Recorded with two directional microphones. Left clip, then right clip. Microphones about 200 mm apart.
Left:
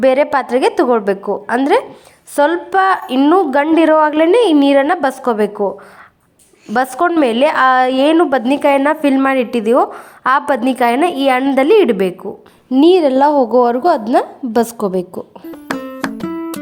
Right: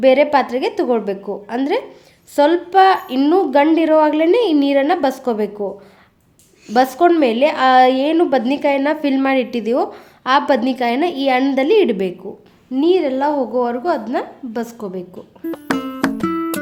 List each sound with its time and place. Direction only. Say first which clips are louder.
0.0 s a woman's voice: even; 10° left (ahead or behind)
6.7 s a woman's voice: even; 10° left (ahead or behind)
12.7 s a woman's voice: left 6 dB; 30° left (ahead or behind)
15.5 s music: even; centre (ahead or behind)